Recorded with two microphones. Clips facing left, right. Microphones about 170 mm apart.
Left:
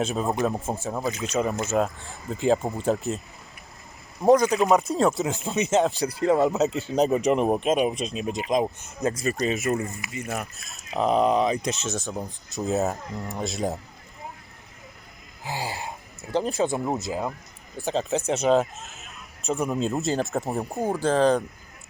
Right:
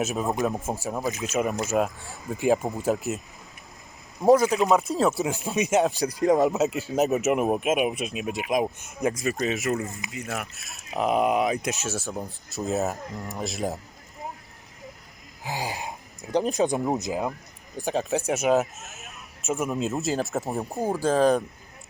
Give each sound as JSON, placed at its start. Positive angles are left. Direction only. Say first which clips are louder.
{"t": 0.0, "sound": "speech", "louder": "left 1 dB", "side_deg": -5}
{"t": 4.3, "sound": "speech", "louder": "even", "side_deg": -5}
{"t": 8.8, "sound": "speech", "louder": "even", "side_deg": -15}
{"t": 15.4, "sound": "speech", "louder": "even", "side_deg": -15}